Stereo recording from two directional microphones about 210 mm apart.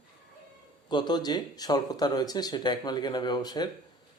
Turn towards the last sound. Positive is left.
turn(degrees=20)  # may be behind; listen again after turning